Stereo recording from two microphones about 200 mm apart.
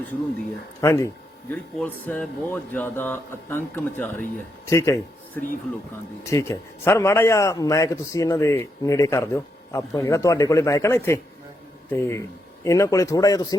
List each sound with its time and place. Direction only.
0.8 s a man's voice: 15° left (ahead or behind)